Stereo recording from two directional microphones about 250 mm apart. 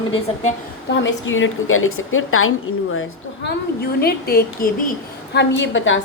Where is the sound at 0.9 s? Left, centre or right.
Left.